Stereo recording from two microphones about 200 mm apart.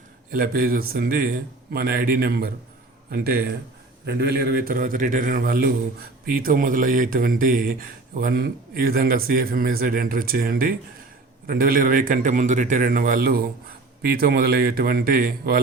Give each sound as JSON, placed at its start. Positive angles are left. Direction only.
{"t": 0.3, "sound": "a man's voice", "side_deg": -45}